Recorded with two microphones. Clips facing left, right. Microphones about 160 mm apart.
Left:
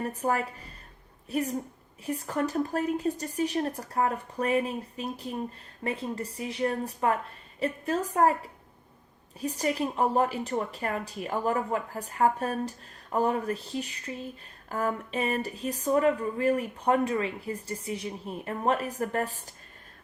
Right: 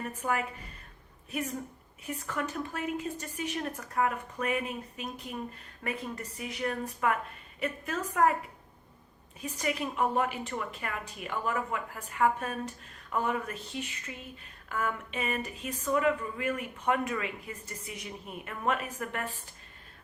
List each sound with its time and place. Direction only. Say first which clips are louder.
0.0 s speech: left 4 dB; 35° left (ahead or behind)
9.4 s speech: left 5 dB; 35° left (ahead or behind)